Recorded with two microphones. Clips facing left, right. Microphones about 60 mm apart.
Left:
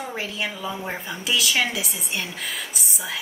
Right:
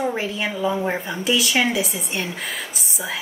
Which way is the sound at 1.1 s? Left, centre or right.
Centre.